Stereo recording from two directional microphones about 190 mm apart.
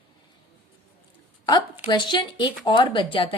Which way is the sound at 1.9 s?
25° left (ahead or behind).